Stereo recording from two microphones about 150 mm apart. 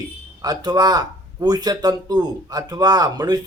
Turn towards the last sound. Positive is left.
turn(degrees=-25)  # may be behind; listen again after turning